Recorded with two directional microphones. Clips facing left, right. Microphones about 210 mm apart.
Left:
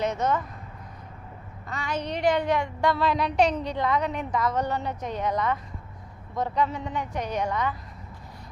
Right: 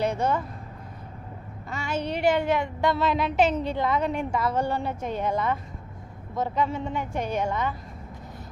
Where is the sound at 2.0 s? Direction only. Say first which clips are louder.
Right 1 dB; 5° right (ahead or behind).